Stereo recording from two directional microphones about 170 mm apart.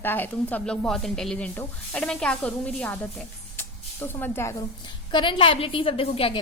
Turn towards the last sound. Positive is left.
turn(degrees=35)  # may be behind; listen again after turning